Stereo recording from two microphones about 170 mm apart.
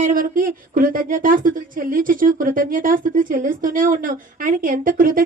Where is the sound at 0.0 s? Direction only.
55° right (ahead or behind).